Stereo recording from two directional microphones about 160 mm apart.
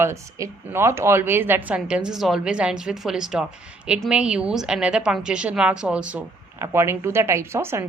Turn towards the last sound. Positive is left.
turn(degrees=-15)  # may be behind; listen again after turning